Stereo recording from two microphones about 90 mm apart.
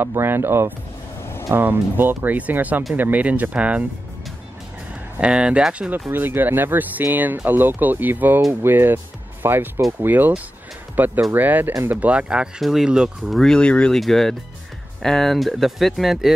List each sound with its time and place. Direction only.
0.0 s speech: 25° right (ahead or behind)
1.2 s vehicle: 30° left (ahead or behind)
1.5 s speech: 25° right (ahead or behind)
5.2 s speech: 10° right (ahead or behind)
13.4 s speech: 10° left (ahead or behind)